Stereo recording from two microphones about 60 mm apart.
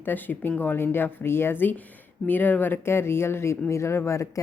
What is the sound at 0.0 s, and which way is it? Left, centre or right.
Speech, left.